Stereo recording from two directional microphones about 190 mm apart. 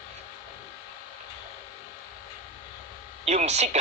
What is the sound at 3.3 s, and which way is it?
Speech, 35° right (ahead or behind).